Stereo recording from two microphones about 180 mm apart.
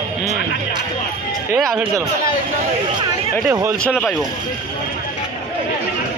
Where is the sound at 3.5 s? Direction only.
15° right (ahead or behind).